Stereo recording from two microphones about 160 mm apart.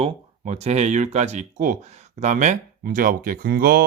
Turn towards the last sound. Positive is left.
turn(degrees=-70)  # may be behind; listen again after turning